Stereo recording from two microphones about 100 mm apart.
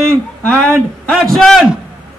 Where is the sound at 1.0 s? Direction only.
5° left (ahead or behind).